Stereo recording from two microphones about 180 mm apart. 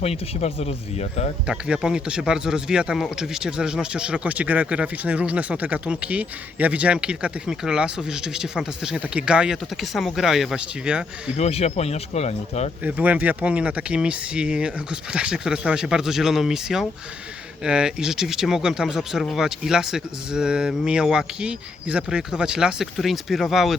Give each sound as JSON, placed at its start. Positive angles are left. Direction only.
{"t": 0.0, "sound": "speech", "side_deg": 35}
{"t": 1.5, "sound": "speech", "side_deg": -5}
{"t": 11.3, "sound": "speech", "side_deg": 35}
{"t": 12.8, "sound": "speech", "side_deg": -10}